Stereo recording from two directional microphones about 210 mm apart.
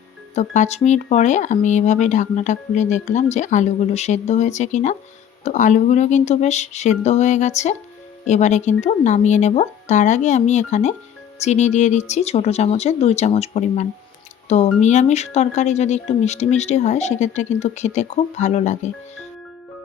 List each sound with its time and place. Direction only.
0.3 s speech: 35° left (ahead or behind)